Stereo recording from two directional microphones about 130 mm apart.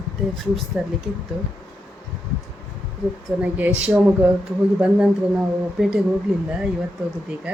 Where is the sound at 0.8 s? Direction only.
5° right (ahead or behind).